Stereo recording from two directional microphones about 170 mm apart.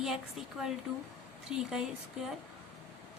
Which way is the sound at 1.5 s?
5° right (ahead or behind).